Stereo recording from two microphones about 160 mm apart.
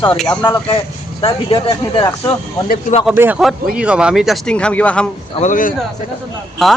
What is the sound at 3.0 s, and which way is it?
A man's voice, 10° right (ahead or behind).